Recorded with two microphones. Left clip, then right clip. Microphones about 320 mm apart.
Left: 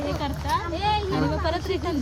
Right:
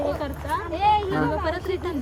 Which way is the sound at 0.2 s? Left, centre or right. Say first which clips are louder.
Left 1 dB; centre.